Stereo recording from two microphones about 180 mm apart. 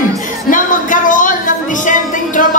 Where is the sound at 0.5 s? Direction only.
45° left (ahead or behind).